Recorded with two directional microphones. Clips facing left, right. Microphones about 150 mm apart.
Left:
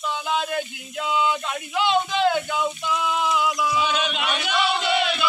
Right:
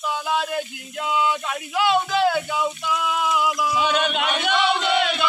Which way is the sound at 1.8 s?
5° right (ahead or behind).